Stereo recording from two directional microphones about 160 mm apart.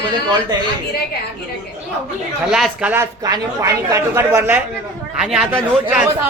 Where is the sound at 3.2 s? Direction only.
20° right (ahead or behind).